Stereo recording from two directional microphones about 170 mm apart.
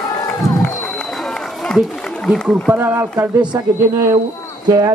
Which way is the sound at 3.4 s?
25° right (ahead or behind).